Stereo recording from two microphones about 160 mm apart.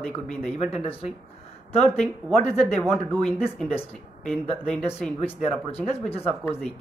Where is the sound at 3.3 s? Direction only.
5° right (ahead or behind).